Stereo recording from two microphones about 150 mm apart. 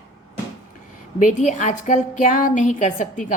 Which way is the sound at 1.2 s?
55° left (ahead or behind).